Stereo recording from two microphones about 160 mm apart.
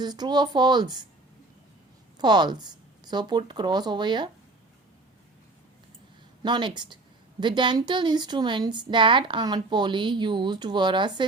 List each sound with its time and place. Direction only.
0.0 s a woman's voice: 25° right (ahead or behind)
2.1 s a woman's voice: 25° right (ahead or behind)
6.4 s a woman's voice: 30° right (ahead or behind)